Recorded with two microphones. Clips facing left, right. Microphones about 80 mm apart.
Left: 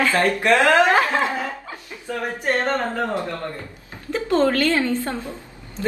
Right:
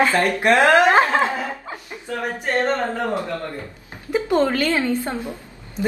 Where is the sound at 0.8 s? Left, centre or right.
Right.